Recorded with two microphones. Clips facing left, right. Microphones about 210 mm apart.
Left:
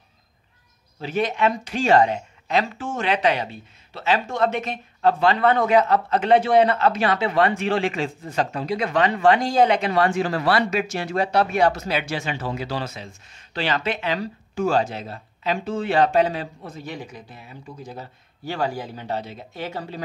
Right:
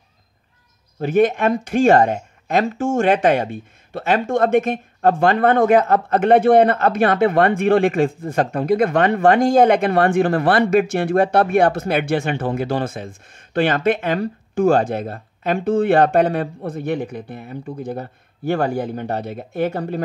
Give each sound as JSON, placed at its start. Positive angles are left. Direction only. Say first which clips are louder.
{"t": 0.9, "sound": "speech", "louder": "right 8 dB", "side_deg": -50}